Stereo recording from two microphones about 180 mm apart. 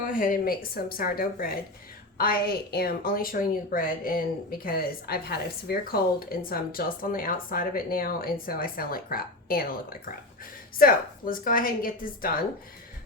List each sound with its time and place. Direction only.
0.0 s a woman's voice: 50° left (ahead or behind)
10.8 s a woman's voice: 50° left (ahead or behind)